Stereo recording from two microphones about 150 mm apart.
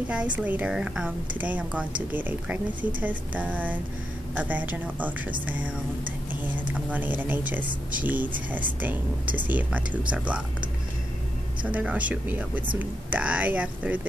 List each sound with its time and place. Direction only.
0.1 s a woman's voice: 10° right (ahead or behind)
6.7 s a woman's voice: 10° right (ahead or behind)
11.6 s a woman's voice: 10° right (ahead or behind)